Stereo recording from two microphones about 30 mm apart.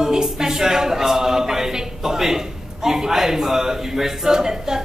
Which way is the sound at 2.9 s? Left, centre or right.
Centre.